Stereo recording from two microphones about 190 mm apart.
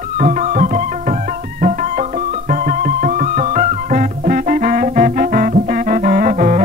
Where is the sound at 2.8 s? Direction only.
45° right (ahead or behind).